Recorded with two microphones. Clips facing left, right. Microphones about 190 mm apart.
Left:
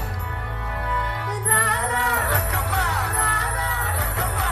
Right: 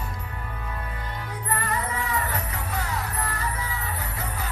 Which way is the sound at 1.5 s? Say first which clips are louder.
Left 1 dB; 75° left (ahead or behind).